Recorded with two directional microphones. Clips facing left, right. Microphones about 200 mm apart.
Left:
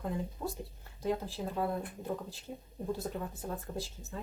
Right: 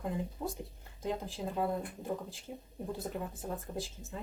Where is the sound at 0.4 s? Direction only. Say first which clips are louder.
Even; 20° right (ahead or behind).